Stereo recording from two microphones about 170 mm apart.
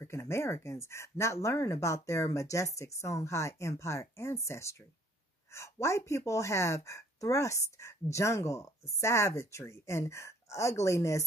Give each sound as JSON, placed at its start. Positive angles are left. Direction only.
{"t": 0.0, "sound": "a woman's voice", "side_deg": 15}